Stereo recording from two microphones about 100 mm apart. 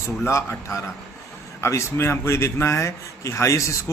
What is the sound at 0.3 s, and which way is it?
A man's voice, 30° left (ahead or behind).